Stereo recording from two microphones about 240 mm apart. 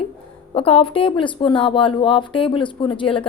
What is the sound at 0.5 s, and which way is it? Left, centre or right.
Speech, left.